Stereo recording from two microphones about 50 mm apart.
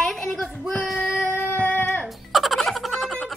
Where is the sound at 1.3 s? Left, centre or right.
Left.